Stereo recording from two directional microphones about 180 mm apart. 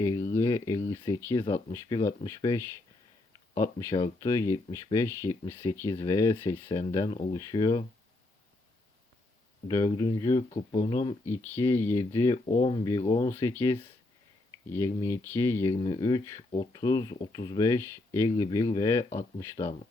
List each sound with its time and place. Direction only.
0.0 s speech: 15° left (ahead or behind)
9.6 s speech: 20° left (ahead or behind)
11.3 s speech: 10° left (ahead or behind)
12.5 s speech: 30° left (ahead or behind)
13.2 s speech: 15° left (ahead or behind)